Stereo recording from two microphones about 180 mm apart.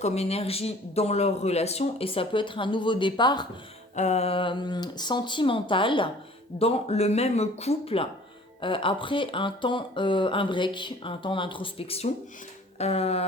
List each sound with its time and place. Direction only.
0.0 s speech: 35° left (ahead or behind)
3.9 s speech: 40° left (ahead or behind)